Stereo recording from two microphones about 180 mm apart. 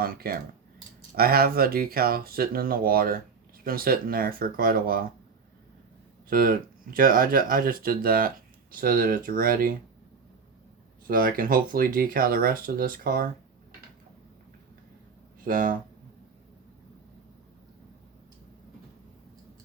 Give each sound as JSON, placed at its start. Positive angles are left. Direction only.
{"t": 0.0, "sound": "speech", "side_deg": -55}
{"t": 6.2, "sound": "speech", "side_deg": -55}
{"t": 11.0, "sound": "speech", "side_deg": -50}
{"t": 15.4, "sound": "speech", "side_deg": -50}